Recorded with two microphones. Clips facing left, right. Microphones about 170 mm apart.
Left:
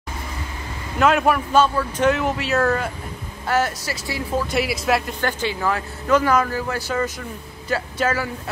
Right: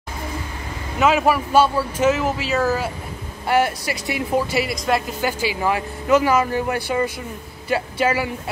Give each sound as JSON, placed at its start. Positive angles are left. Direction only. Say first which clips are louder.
{"t": 0.9, "sound": "speech", "louder": "even", "side_deg": -5}
{"t": 4.5, "sound": "speech", "louder": "even", "side_deg": 0}